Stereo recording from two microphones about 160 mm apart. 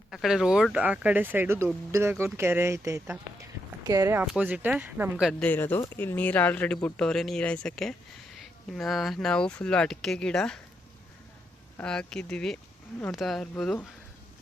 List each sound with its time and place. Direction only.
0.1 s speech: centre (ahead or behind); by 4.2 s 20° right (ahead or behind)
4.2 s speech: 10° right (ahead or behind)
5.3 s speech: 10° left (ahead or behind)
11.8 s speech: 5° left (ahead or behind)